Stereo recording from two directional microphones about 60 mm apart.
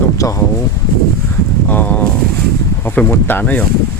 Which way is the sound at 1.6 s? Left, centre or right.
Left.